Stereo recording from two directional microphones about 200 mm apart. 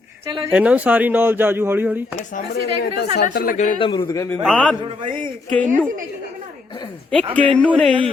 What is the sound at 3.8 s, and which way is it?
Speech, 20° left (ahead or behind).